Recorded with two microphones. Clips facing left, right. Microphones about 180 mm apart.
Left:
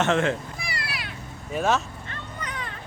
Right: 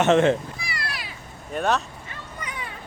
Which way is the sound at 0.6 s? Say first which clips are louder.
Even; 55° left (ahead or behind).